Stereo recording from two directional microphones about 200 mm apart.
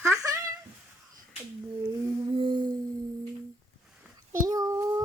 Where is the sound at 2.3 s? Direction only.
25° right (ahead or behind).